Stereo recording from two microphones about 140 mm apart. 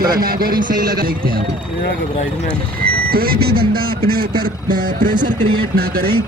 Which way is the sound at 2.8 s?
90° right.